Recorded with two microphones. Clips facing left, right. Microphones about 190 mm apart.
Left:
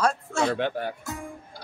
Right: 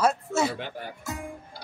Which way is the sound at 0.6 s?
65° left (ahead or behind).